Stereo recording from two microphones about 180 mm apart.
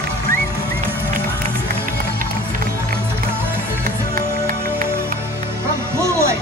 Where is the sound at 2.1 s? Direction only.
55° right (ahead or behind).